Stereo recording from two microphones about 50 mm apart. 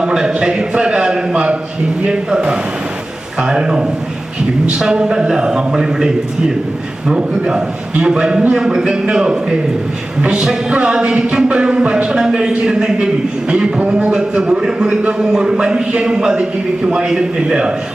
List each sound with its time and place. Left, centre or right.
0.0 s a sound: centre
2.0 s a man's voice: centre
3.4 s music: centre
7.1 s music: centre
13.7 s a man's voice: right
14.6 s music: centre